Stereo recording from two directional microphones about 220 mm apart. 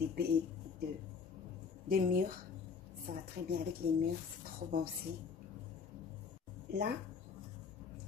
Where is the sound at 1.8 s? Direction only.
40° right (ahead or behind).